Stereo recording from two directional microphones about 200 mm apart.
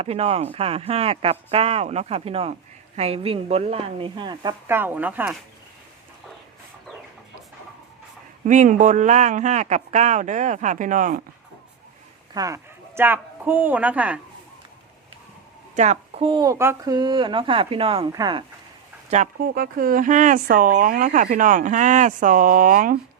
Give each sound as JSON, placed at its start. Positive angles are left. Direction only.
{"t": 0.0, "sound": "speech", "side_deg": -30}
{"t": 8.4, "sound": "speech", "side_deg": -40}
{"t": 12.3, "sound": "speech", "side_deg": -15}
{"t": 15.7, "sound": "speech", "side_deg": -35}
{"t": 19.1, "sound": "speech", "side_deg": -40}